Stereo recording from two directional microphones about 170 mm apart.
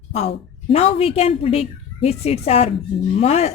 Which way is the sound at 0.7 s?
35° left (ahead or behind).